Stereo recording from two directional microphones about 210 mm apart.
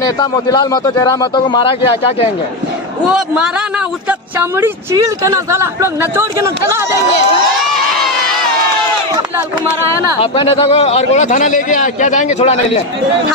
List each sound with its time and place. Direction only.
0.0 s a man's voice: 20° left (ahead or behind)
4.1 s speech: 10° right (ahead or behind)
10.3 s a man's voice: 25° left (ahead or behind)